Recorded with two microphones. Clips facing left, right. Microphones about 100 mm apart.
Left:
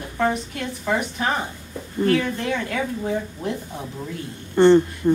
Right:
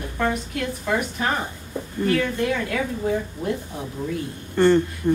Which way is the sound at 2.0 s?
Centre (ahead or behind).